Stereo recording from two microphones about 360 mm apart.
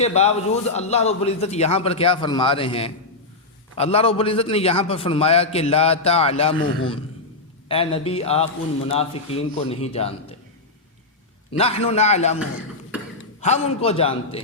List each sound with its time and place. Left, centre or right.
0.0 s a man's voice: centre
11.5 s a man's voice: centre
12.9 s a sound: centre
13.4 s a man's voice: centre